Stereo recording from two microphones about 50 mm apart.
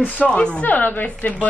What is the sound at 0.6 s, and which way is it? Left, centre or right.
Speech, left.